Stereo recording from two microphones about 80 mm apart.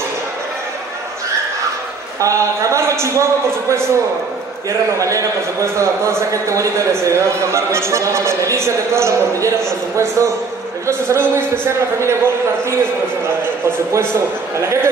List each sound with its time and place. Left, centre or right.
2.1 s a man's voice: right
13.7 s a man's voice: right